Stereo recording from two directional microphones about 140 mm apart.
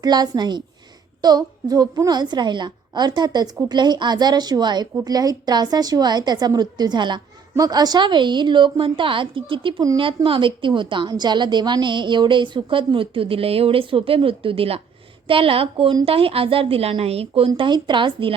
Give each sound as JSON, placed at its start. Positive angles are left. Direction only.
{"t": 0.0, "sound": "a woman's voice", "side_deg": -30}